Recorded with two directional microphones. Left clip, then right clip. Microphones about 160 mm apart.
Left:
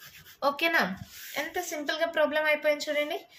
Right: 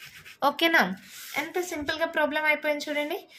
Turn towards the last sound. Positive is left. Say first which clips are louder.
# even
turn(degrees=-30)  # may be behind; listen again after turning